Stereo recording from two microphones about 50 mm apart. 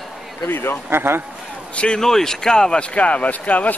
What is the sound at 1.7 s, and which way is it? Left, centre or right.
Speech, centre.